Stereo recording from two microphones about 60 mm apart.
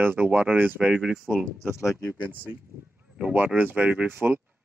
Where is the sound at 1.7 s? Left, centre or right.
Left.